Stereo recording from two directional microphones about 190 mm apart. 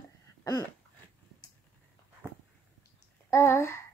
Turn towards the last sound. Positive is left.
turn(degrees=15)  # may be behind; listen again after turning